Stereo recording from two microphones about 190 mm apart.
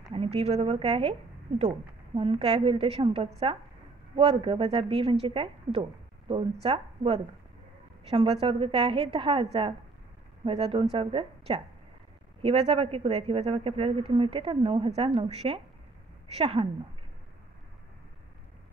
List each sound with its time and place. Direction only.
0.1 s a woman's voice: 30° right (ahead or behind)
2.1 s a woman's voice: 30° right (ahead or behind)